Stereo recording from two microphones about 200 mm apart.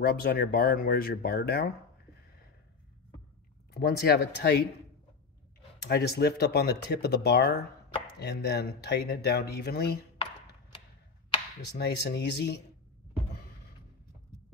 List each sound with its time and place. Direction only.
0.0 s speech: 50° left (ahead or behind)
3.7 s speech: 55° left (ahead or behind)
5.8 s speech: 55° left (ahead or behind)
11.7 s speech: 55° left (ahead or behind)